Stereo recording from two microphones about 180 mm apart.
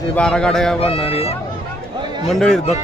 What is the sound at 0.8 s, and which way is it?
Speech, 35° left (ahead or behind).